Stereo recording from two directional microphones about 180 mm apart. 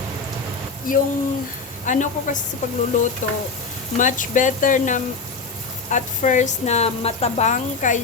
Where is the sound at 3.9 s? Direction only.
45° left (ahead or behind).